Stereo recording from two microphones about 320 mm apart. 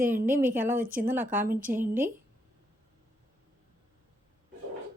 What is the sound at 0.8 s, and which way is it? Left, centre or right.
Speech, right.